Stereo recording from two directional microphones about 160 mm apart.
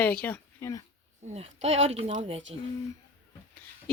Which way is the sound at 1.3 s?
40° right (ahead or behind).